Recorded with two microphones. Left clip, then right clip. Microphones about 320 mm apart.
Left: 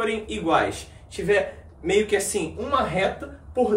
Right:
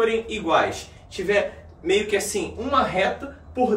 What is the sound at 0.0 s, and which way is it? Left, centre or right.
Speech, centre.